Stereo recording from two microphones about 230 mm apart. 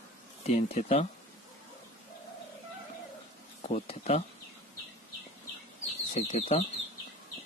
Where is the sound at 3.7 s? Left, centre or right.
Left.